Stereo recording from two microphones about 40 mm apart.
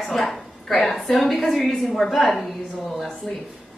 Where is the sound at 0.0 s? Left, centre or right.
Centre.